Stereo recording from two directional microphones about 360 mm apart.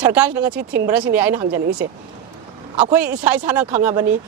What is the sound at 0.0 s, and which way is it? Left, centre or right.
Speech, centre.